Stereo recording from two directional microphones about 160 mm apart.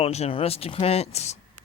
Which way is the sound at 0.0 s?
40° left (ahead or behind).